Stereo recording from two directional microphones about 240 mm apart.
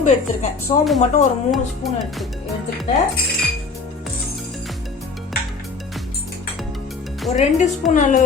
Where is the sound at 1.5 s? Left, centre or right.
Centre.